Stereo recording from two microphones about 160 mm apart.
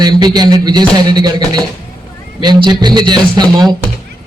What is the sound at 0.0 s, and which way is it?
A man's voice, 25° right (ahead or behind).